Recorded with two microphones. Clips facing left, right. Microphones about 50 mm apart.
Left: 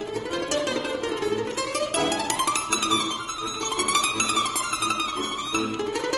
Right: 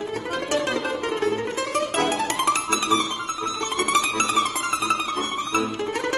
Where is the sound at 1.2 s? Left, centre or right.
Right.